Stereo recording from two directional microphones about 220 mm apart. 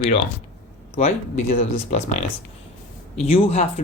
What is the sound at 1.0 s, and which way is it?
Speech, 30° left (ahead or behind).